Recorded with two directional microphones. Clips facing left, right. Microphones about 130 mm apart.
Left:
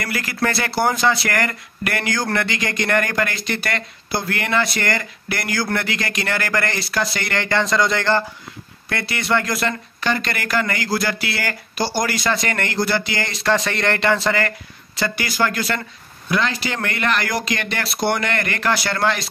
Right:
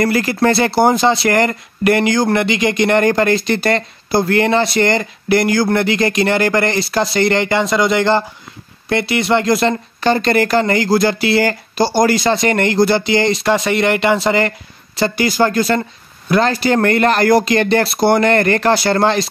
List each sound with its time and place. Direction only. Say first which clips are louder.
0.0 s speech: right 9 dB; 30° right (ahead or behind)
7.4 s speech: right 4 dB; 15° right (ahead or behind); by 19.2 s 30° right (ahead or behind)